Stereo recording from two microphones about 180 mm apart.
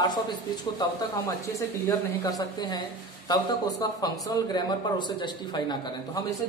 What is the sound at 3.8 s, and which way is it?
A man's voice, 20° left (ahead or behind).